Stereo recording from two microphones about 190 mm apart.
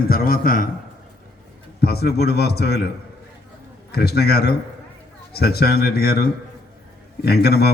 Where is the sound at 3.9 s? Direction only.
55° left (ahead or behind).